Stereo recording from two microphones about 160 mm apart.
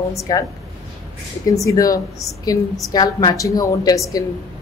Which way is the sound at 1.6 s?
20° left (ahead or behind).